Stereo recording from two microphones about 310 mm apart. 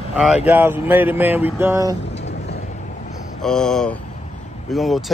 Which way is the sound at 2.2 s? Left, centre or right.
Left.